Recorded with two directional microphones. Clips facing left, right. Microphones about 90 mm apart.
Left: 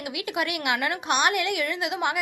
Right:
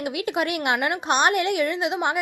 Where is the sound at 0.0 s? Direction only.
35° right (ahead or behind).